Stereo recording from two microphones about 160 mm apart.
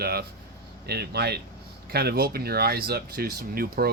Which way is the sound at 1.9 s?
75° right (ahead or behind).